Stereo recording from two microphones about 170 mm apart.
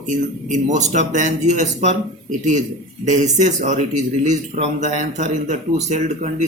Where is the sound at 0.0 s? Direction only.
45° right (ahead or behind).